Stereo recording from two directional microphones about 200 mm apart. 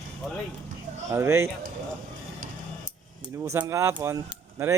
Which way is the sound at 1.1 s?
15° right (ahead or behind).